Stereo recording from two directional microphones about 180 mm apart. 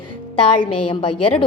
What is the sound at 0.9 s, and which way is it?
Speech, 30° left (ahead or behind).